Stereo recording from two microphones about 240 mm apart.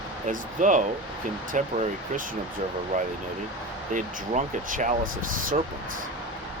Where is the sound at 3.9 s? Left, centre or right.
Right.